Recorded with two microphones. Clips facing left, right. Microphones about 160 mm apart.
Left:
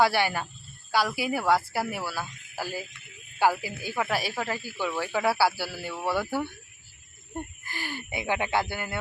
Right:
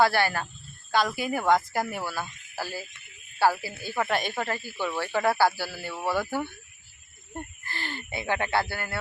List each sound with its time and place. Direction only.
0.0 s speech: 15° left (ahead or behind)
7.6 s speech: 10° left (ahead or behind)